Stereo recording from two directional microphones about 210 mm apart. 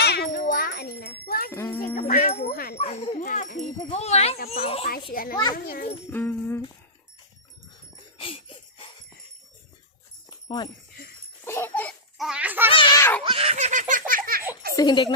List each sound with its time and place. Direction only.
0.0 s a sound: 50° left (ahead or behind)
1.5 s music: 10° left (ahead or behind)
2.0 s jingle bell: 40° left (ahead or behind)
2.7 s a sound: 30° left (ahead or behind)
3.8 s speech: 30° left (ahead or behind)
5.1 s a child's voice: 45° left (ahead or behind)
6.1 s speech: 10° left (ahead or behind)
8.2 s a sound: 25° left (ahead or behind)
10.2 s dog: 20° left (ahead or behind)
11.4 s baby laughter: 10° left (ahead or behind); by 12.7 s 10° right (ahead or behind)
12.7 s a sound: 20° left (ahead or behind)
13.2 s laughter: 25° right (ahead or behind); by 14.4 s 40° right (ahead or behind)
14.8 s speech: 20° left (ahead or behind)